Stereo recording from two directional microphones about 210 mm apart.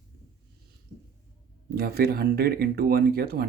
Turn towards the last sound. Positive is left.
turn(degrees=-45)  # may be behind; listen again after turning